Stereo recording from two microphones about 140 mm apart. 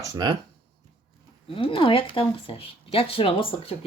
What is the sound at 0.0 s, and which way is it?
Speech, 25° right (ahead or behind).